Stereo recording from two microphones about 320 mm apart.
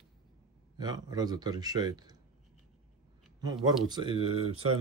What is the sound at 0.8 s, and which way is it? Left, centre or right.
A man's voice, centre.